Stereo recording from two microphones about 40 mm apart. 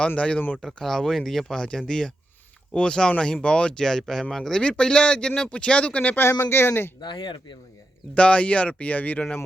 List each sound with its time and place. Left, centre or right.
0.2 s speech: left
0.6 s speech: centre
1.5 s speech: left
3.8 s speech: centre
4.8 s speech: left
6.1 s speech: left
8.1 s speech: left